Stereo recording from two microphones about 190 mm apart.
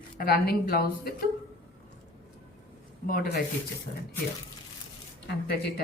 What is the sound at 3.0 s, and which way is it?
Speech, 55° left (ahead or behind).